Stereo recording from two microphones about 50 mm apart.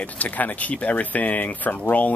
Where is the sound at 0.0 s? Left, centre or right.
Left.